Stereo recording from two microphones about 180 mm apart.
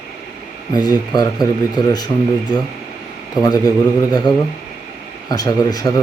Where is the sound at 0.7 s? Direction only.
20° left (ahead or behind).